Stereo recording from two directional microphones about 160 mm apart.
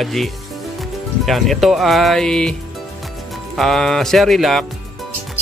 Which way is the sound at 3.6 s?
Centre (ahead or behind).